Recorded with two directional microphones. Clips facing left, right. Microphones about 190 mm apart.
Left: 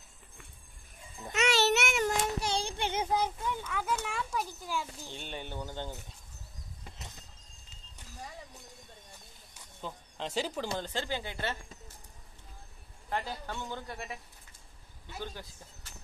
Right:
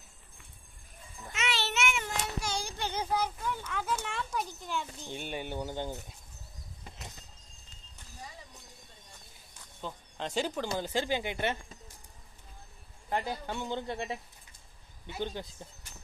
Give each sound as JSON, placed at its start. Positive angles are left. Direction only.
{"t": 1.3, "sound": "child singing", "side_deg": 40}
{"t": 3.7, "sound": "a sound", "side_deg": 5}
{"t": 5.1, "sound": "speech", "side_deg": -10}
{"t": 9.5, "sound": "a sound", "side_deg": 0}
{"t": 10.7, "sound": "speech", "side_deg": -10}
{"t": 13.1, "sound": "speech", "side_deg": -15}